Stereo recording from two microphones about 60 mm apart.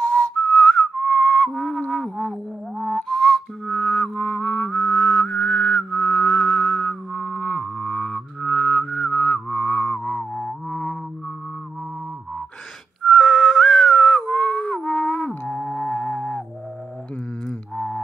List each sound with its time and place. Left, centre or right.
0.0 s whistling: left
1.5 s a sound: centre
2.0 s whistling: centre; by 11.0 s left
13.0 s whistling: centre; by 16.4 s left
17.5 s music: centre